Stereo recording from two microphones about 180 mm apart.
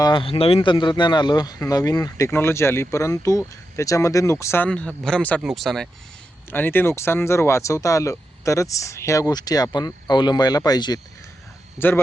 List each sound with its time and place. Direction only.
0.0 s speech: 25° left (ahead or behind)